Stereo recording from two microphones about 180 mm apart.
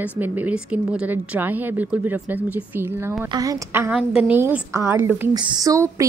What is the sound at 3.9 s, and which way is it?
A woman's voice, 5° right (ahead or behind).